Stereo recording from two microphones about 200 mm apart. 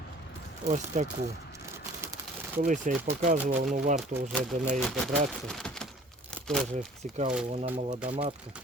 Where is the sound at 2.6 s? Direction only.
40° right (ahead or behind).